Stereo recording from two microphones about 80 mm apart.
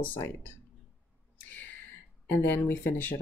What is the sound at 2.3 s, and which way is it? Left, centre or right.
Speech, left.